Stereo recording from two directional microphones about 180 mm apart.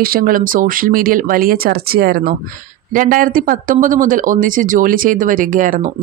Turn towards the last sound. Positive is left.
turn(degrees=-45)  # may be behind; listen again after turning